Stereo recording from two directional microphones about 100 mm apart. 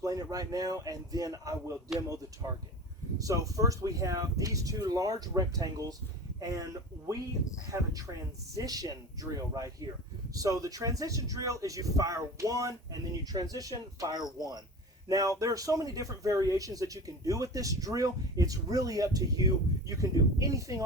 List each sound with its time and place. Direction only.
0.0 s speech: 35° right (ahead or behind)
7.7 s speech: 35° right (ahead or behind)